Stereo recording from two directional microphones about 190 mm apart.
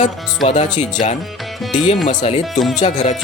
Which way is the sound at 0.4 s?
40° left (ahead or behind).